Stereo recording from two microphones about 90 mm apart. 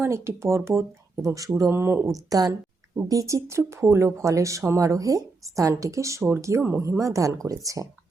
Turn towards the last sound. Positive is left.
turn(degrees=-40)  # may be behind; listen again after turning